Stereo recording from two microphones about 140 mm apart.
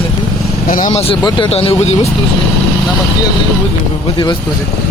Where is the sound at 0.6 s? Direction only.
75° left (ahead or behind).